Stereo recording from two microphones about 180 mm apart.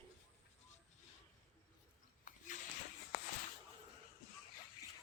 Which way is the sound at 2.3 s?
45° left (ahead or behind).